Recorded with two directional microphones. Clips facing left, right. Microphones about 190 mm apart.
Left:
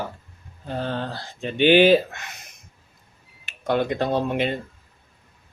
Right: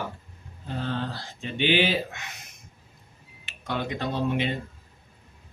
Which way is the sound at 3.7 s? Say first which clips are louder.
Left 8 dB; 50° left (ahead or behind).